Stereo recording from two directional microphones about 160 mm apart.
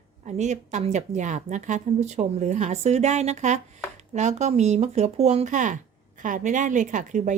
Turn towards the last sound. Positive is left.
turn(degrees=-50)  # may be behind; listen again after turning